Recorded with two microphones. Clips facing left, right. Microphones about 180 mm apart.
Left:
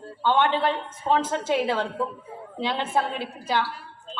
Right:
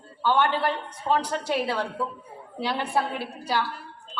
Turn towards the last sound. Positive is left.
turn(degrees=20)  # may be behind; listen again after turning